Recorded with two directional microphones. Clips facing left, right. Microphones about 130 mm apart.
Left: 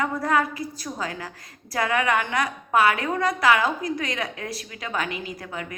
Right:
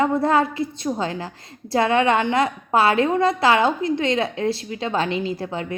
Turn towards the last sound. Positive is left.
turn(degrees=-30)  # may be behind; listen again after turning